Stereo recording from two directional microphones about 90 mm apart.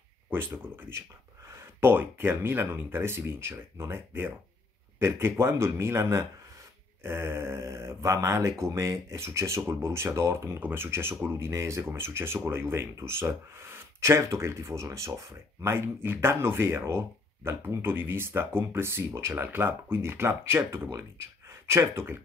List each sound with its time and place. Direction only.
0.7 s speech: 25° right (ahead or behind)